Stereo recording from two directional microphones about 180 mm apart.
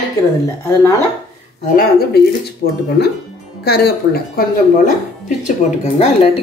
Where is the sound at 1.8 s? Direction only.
60° left (ahead or behind).